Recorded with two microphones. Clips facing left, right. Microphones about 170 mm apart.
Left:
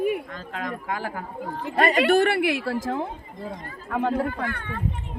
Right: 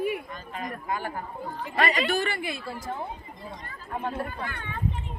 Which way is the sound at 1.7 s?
45° left (ahead or behind).